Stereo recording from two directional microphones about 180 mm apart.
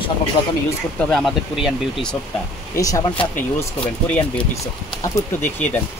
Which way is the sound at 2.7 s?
20° left (ahead or behind).